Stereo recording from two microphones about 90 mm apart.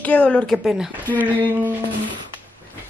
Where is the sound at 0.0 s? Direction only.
15° left (ahead or behind).